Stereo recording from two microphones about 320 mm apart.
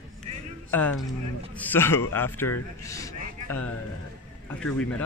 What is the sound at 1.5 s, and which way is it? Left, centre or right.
Speech, centre.